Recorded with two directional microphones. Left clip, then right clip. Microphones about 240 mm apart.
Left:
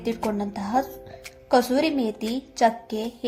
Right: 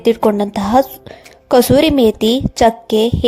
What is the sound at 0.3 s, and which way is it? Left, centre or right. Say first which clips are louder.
Speech: right 13 dB; right.